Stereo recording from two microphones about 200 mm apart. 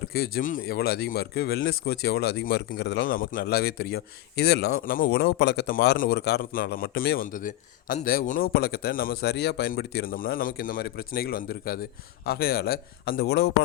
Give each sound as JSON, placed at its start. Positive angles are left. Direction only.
{"t": 0.1, "sound": "speech", "side_deg": 50}